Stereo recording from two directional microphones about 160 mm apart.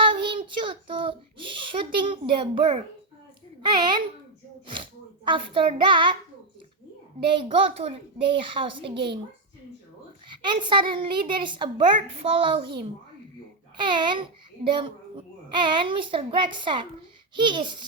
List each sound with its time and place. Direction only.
0.0 s child singing: 30° right (ahead or behind)
1.8 s a child's voice: 30° right (ahead or behind)
7.3 s a child's voice: 35° right (ahead or behind)
10.3 s a woman's voice: 30° right (ahead or behind)
13.7 s a child's voice: 30° right (ahead or behind)